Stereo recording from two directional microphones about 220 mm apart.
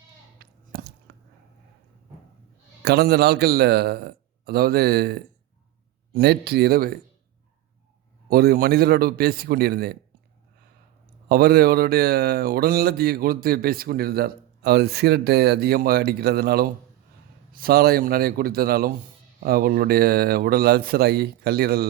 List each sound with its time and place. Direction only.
0.4 s a sound: 45° right (ahead or behind)
1.1 s squish: 45° right (ahead or behind)
2.8 s speech: 45° right (ahead or behind)
8.3 s speech: 45° right (ahead or behind)
11.3 s speech: 45° right (ahead or behind)